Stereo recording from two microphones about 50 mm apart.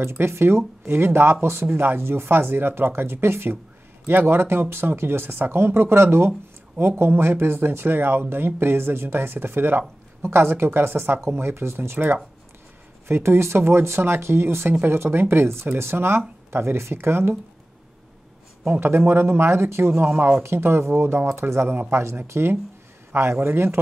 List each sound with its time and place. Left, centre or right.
0.2 s speech: right
13.1 s speech: right
18.8 s speech: right
21.3 s speech: right